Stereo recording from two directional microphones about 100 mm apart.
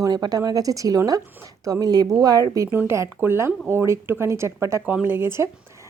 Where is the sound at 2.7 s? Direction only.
25° right (ahead or behind).